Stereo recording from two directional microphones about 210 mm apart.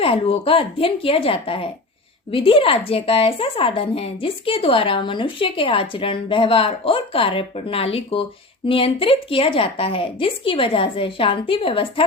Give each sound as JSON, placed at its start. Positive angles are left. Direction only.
{"t": 0.0, "sound": "speech", "side_deg": 25}